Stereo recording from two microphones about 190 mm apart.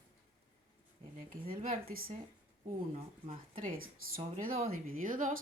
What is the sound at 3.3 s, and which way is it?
Speech, 45° right (ahead or behind).